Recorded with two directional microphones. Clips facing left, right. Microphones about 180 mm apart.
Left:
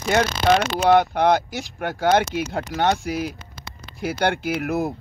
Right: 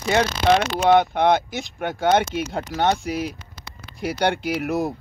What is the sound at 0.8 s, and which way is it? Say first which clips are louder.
Speech: even; centre (ahead or behind).